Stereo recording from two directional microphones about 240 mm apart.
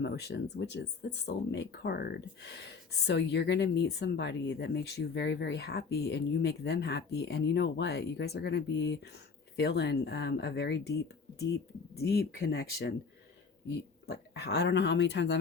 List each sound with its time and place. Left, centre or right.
0.0 s speech: left